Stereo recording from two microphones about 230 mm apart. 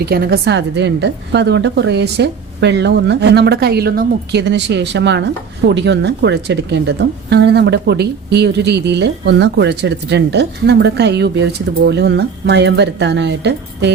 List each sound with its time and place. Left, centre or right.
0.0 s speech: right